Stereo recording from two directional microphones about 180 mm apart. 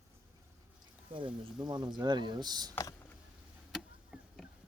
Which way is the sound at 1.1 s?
30° right (ahead or behind).